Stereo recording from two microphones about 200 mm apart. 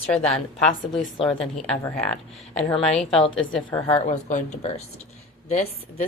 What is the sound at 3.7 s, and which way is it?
A woman's voice, 25° left (ahead or behind).